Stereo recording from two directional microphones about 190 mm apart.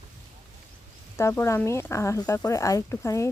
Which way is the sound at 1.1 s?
10° left (ahead or behind).